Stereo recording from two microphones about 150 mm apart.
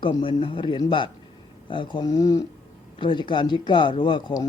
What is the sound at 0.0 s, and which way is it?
Speech, 35° left (ahead or behind).